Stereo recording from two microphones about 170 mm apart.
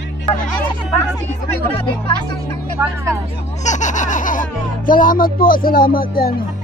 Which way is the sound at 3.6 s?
45° left (ahead or behind).